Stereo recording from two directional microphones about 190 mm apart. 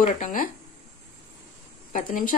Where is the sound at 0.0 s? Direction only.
45° left (ahead or behind).